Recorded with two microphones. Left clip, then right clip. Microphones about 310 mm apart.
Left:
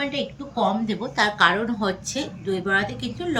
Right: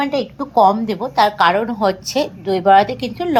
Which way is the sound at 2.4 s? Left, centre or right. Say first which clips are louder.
Right 11 dB; right.